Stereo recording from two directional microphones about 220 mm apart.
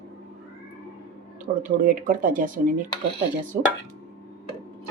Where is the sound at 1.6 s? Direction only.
40° right (ahead or behind).